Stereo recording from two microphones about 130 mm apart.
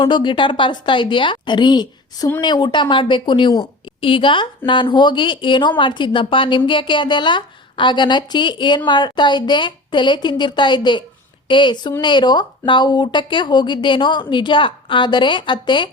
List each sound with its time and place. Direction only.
0.0 s a woman's voice: 40° left (ahead or behind)